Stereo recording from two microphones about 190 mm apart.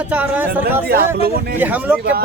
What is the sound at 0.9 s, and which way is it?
Speech, 55° right (ahead or behind).